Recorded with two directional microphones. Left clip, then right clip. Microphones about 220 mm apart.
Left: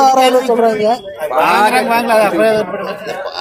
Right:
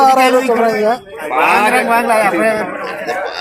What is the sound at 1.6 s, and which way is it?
Speech, 45° left (ahead or behind).